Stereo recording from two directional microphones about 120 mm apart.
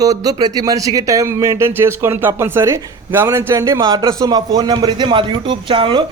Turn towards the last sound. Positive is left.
turn(degrees=-45)  # may be behind; listen again after turning